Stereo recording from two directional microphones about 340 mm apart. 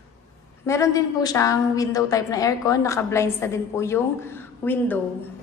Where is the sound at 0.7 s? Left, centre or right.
Centre.